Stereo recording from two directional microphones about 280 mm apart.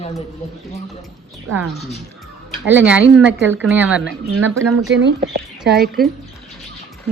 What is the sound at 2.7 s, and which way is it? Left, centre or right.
Speech, centre.